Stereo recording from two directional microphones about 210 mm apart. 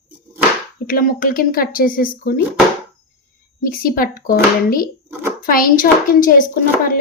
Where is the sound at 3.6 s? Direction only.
40° left (ahead or behind).